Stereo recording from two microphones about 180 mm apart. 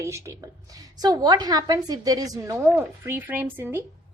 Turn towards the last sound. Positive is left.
turn(degrees=-10)  # may be behind; listen again after turning